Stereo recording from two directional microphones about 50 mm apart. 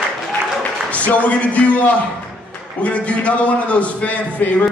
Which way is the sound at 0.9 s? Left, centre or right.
Left.